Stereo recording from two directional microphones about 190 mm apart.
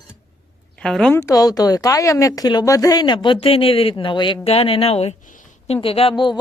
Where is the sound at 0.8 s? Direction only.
5° left (ahead or behind).